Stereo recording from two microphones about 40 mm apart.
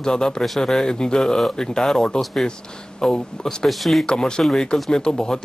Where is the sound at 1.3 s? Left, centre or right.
Centre.